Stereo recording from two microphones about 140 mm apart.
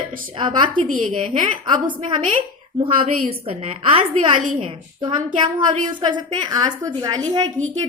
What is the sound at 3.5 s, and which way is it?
A woman's voice, 40° right (ahead or behind).